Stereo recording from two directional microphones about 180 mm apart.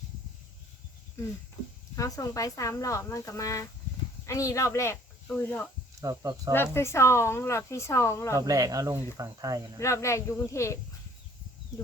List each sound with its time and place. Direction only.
1.2 s speech: 15° left (ahead or behind)
6.0 s speech: 20° right (ahead or behind)
6.5 s speech: 15° left (ahead or behind)
8.4 s speech: 20° right (ahead or behind)
9.7 s speech: 15° left (ahead or behind)